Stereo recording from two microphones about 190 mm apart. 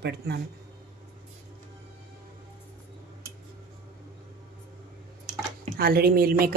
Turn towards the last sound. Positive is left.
turn(degrees=-50)  # may be behind; listen again after turning